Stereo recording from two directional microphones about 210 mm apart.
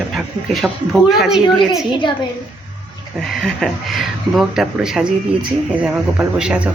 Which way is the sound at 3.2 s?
Centre (ahead or behind).